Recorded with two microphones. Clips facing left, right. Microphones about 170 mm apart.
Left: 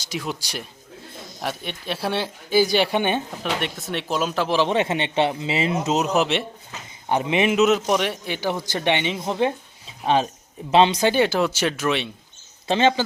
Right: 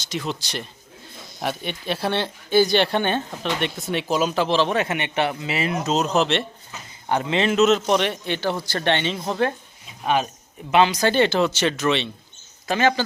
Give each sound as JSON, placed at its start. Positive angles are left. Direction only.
{"t": 0.1, "sound": "a man's voice", "side_deg": 10}
{"t": 3.6, "sound": "speech", "side_deg": 0}
{"t": 4.7, "sound": "speech", "side_deg": 25}
{"t": 6.1, "sound": "a man's voice", "side_deg": 10}
{"t": 10.7, "sound": "speech", "side_deg": 30}
{"t": 11.0, "sound": "a man's voice", "side_deg": 10}
{"t": 12.6, "sound": "speech", "side_deg": 25}